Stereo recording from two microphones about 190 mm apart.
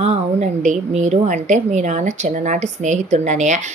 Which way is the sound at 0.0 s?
35° right (ahead or behind).